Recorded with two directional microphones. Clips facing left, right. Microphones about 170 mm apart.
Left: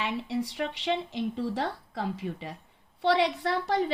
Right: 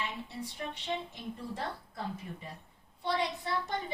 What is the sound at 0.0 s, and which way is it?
A woman's voice, 90° left.